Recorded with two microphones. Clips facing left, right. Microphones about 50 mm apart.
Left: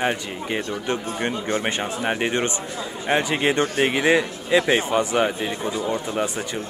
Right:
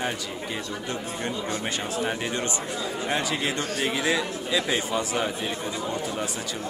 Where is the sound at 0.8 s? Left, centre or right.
Left.